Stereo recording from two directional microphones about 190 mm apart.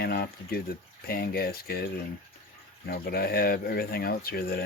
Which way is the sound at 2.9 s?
55° left (ahead or behind).